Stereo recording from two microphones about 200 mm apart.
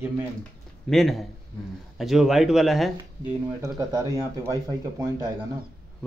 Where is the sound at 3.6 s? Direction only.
15° right (ahead or behind).